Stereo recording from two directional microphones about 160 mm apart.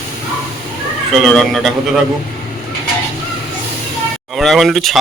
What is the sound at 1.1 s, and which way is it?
Speech, centre (ahead or behind).